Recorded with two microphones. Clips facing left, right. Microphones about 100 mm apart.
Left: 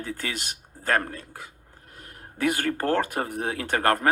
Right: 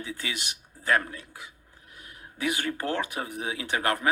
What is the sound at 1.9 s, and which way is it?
Speech, 50° left (ahead or behind).